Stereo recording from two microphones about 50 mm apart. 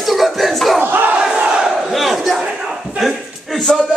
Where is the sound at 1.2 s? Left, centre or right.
Centre.